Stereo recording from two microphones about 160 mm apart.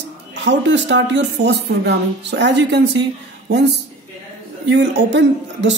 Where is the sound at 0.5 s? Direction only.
90° right.